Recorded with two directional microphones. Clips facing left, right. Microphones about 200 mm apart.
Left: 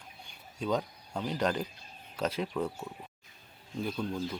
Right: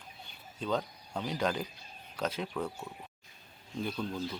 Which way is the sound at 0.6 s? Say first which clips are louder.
Left 2 dB; 10° left (ahead or behind).